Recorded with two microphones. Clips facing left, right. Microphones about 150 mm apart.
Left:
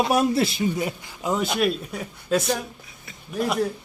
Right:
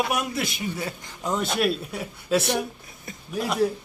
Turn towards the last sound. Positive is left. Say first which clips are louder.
# left 3 dB
turn(degrees=0)  # may be behind; listen again after turning